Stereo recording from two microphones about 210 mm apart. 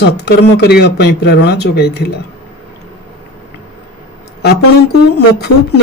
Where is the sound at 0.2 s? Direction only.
50° left (ahead or behind).